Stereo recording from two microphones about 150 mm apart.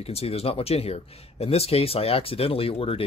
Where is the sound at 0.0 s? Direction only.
40° left (ahead or behind).